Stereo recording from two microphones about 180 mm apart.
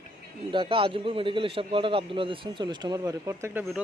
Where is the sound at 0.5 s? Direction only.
30° right (ahead or behind).